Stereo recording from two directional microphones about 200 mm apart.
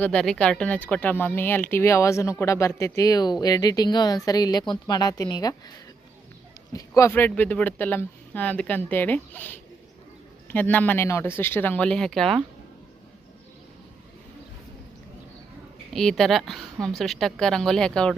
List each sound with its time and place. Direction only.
0.0 s a woman's voice: 5° left (ahead or behind)
6.7 s speech: 15° left (ahead or behind)
15.9 s speech: centre (ahead or behind)